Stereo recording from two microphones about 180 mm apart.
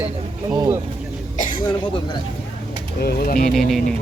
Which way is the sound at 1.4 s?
50° left (ahead or behind).